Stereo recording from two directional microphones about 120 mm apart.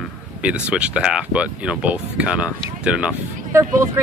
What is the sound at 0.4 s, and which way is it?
Speech, 10° right (ahead or behind).